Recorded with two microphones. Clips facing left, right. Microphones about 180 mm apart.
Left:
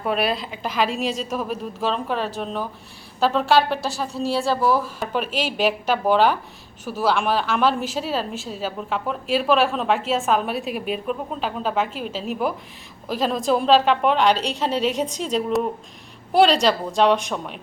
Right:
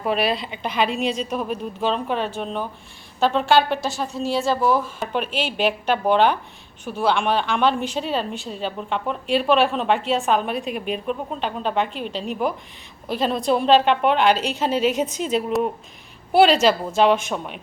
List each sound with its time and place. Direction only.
0.0 s a woman's voice: centre (ahead or behind)
5.3 s a woman's voice: 40° left (ahead or behind)
5.5 s a woman's voice: 5° left (ahead or behind)